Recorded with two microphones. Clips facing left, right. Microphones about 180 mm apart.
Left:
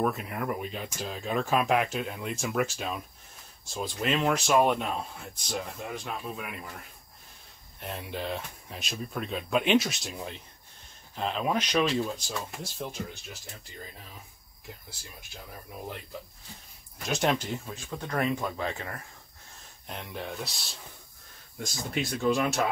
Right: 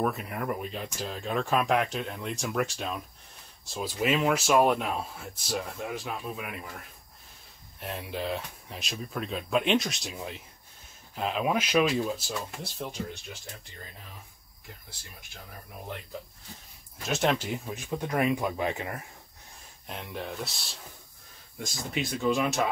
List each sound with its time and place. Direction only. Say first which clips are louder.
0.0 s speech: left 1 dB; centre (ahead or behind)
17.1 s speech: right 1 dB; centre (ahead or behind)
17.6 s speech: right 4 dB; 20° right (ahead or behind)
19.9 s speech: right 1 dB; centre (ahead or behind)